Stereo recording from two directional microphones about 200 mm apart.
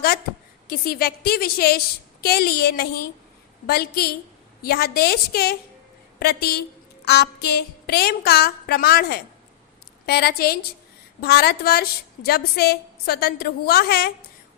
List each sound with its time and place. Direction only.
0.7 s a woman's voice: 50° left (ahead or behind)